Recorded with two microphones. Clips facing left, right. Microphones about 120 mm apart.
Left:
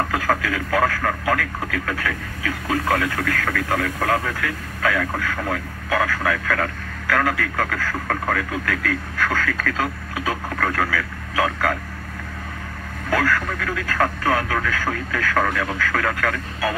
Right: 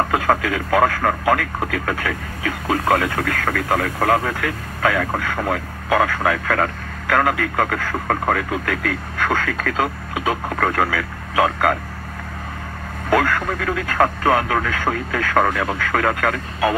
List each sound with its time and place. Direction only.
0.1 s speech: 25° right (ahead or behind)
13.1 s speech: 25° right (ahead or behind)